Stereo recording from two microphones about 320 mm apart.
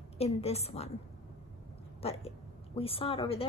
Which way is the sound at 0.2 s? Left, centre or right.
Centre.